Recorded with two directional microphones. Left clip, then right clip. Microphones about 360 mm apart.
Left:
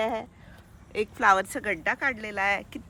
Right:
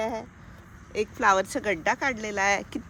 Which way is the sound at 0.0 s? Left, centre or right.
Centre.